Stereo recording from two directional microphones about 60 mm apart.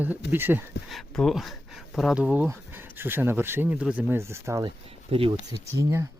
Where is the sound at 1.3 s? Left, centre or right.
Centre.